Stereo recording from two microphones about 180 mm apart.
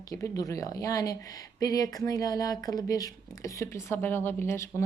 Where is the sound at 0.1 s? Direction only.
20° left (ahead or behind).